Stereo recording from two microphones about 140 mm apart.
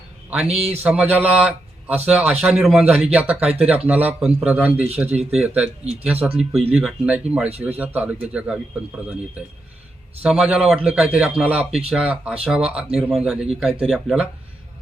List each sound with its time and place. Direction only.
0.3 s a man's voice: 5° right (ahead or behind)
6.3 s speech: 45° right (ahead or behind)
6.7 s speech: 10° right (ahead or behind)
10.2 s speech: 5° right (ahead or behind)